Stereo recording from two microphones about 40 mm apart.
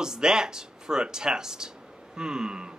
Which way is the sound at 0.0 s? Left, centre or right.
Centre.